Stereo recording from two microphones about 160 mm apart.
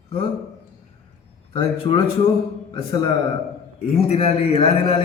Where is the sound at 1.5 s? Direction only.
35° left (ahead or behind).